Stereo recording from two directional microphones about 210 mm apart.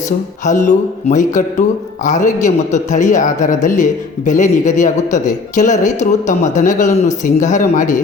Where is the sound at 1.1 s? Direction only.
35° left (ahead or behind).